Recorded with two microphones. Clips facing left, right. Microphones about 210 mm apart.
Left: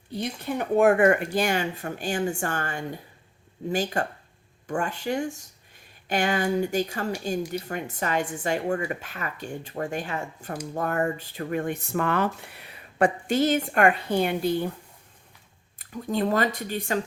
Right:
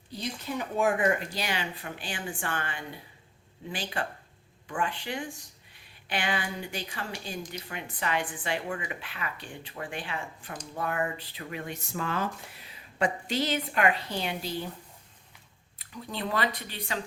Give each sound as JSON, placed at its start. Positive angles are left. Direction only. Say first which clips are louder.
{"t": 0.1, "sound": "speech", "louder": "left 5 dB", "side_deg": 55}
{"t": 15.8, "sound": "speech", "louder": "left 9 dB", "side_deg": 45}